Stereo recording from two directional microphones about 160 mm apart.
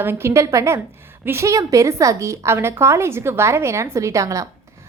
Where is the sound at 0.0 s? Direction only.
15° right (ahead or behind).